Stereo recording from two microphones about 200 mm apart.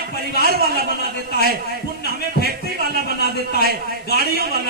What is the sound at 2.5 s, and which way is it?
Speech, 50° right (ahead or behind).